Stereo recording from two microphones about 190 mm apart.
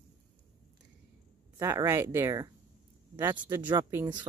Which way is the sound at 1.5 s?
15° right (ahead or behind).